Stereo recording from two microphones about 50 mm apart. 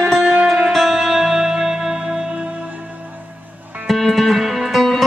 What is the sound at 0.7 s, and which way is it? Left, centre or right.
Music, centre.